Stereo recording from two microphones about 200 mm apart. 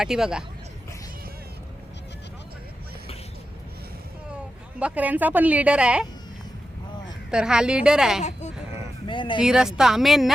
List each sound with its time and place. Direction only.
0.0 s a woman's voice: 5° right (ahead or behind)
4.8 s a woman's voice: 5° right (ahead or behind)
7.3 s a woman's voice: 5° right (ahead or behind)
8.2 s a sound: 35° left (ahead or behind)
9.0 s speech: 25° left (ahead or behind)
9.4 s a woman's voice: 5° right (ahead or behind)